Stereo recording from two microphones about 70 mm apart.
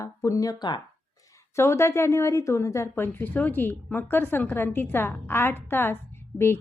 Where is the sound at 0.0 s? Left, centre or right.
Left.